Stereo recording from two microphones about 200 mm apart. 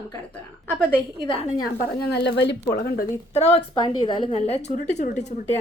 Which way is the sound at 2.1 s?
55° left (ahead or behind).